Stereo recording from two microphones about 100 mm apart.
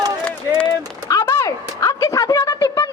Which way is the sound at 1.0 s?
30° left (ahead or behind).